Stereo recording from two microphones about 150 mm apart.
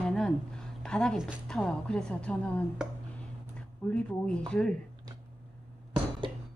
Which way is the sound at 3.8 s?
10° left (ahead or behind).